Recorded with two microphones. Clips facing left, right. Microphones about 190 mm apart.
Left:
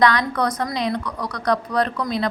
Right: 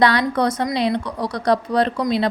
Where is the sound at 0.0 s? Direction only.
30° right (ahead or behind).